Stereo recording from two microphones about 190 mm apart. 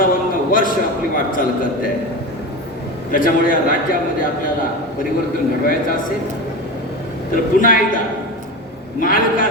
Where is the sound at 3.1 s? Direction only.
45° left (ahead or behind).